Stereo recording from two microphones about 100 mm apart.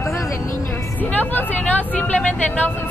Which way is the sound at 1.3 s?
15° left (ahead or behind).